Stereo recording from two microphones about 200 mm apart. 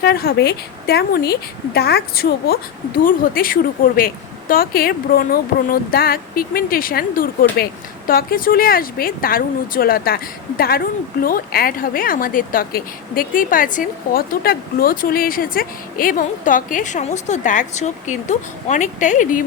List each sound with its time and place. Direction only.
0.0 s a woman's voice: 50° left (ahead or behind)